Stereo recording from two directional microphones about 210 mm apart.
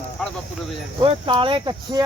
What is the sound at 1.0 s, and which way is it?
Speech, 25° right (ahead or behind).